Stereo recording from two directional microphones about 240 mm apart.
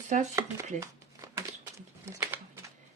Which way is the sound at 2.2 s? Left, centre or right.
Centre.